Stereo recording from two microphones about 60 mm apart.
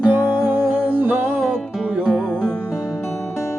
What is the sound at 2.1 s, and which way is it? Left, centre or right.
Music, centre.